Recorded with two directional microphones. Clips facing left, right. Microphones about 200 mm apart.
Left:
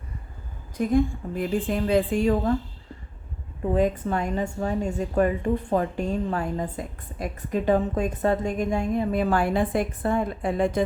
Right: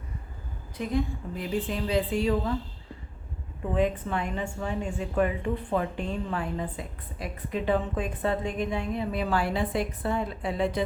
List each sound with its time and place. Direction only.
0.8 s a woman's voice: 50° left (ahead or behind)
3.8 s a woman's voice: 40° left (ahead or behind)